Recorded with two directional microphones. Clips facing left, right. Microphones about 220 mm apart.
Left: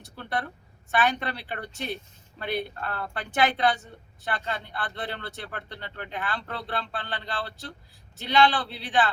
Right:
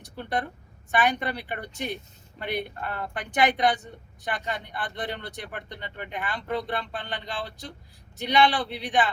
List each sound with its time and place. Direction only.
0.0 s a woman's voice: 15° right (ahead or behind)